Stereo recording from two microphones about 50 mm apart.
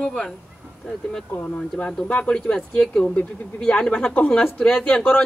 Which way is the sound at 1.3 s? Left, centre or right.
Left.